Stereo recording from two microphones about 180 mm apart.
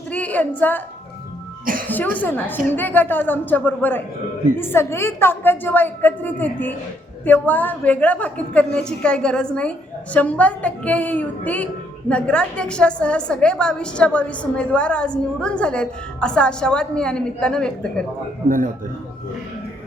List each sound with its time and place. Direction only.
0.1 s a sound: 10° left (ahead or behind)
1.9 s a woman's voice: 10° left (ahead or behind)
18.4 s a man's voice: 50° right (ahead or behind)